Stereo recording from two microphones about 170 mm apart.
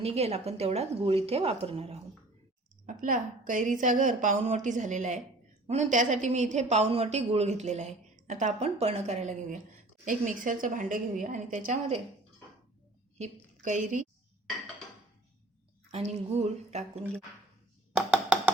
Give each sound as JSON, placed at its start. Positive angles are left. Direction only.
{"t": 0.0, "sound": "a woman's voice", "side_deg": -35}
{"t": 2.8, "sound": "a woman's voice", "side_deg": -50}
{"t": 13.1, "sound": "a woman's voice", "side_deg": -45}
{"t": 15.9, "sound": "a woman's voice", "side_deg": -40}
{"t": 17.9, "sound": "a sound", "side_deg": -5}